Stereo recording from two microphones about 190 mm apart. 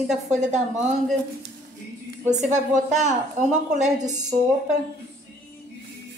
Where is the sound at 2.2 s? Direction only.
40° right (ahead or behind).